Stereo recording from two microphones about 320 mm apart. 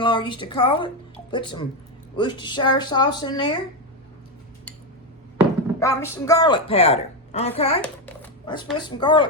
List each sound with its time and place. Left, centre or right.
0.0 s a woman's voice: centre
5.8 s a woman's voice: centre
7.8 s a sound: centre
8.8 s a woman's voice: centre